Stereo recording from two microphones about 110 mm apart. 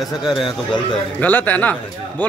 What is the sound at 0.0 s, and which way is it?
Speech, centre (ahead or behind).